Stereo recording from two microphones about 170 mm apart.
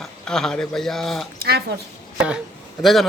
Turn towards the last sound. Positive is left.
turn(degrees=0)  # may be behind; listen again after turning